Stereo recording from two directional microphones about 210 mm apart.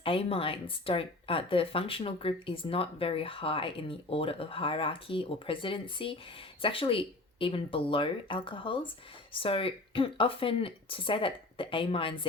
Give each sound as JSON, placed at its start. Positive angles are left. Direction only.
{"t": 0.0, "sound": "speech", "side_deg": 25}